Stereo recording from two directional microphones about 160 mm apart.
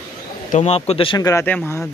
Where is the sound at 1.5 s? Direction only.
10° left (ahead or behind).